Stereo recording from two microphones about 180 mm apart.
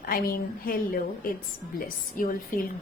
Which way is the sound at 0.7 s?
50° left (ahead or behind).